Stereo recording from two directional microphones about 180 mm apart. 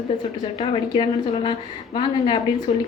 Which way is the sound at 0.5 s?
30° left (ahead or behind).